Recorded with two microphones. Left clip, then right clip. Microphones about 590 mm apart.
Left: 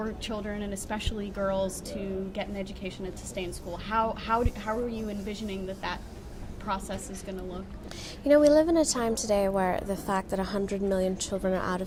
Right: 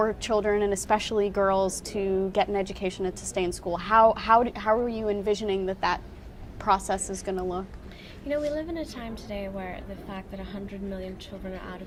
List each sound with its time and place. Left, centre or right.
0.0 s a woman's voice: right
8.3 s a woman's voice: left